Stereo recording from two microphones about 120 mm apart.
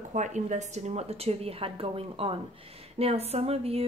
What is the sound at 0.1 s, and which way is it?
A woman's voice, 85° right.